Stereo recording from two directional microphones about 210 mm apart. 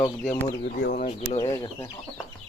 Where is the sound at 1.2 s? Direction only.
20° left (ahead or behind).